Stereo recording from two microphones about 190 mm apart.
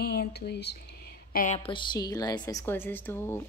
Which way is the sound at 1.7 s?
25° left (ahead or behind).